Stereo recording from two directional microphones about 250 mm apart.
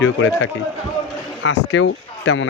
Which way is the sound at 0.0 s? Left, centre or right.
Left.